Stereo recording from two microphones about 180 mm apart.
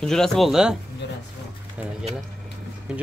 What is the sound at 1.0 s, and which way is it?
Speech, 70° left (ahead or behind).